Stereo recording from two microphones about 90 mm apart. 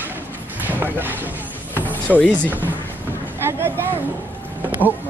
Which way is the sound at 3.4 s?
25° right (ahead or behind).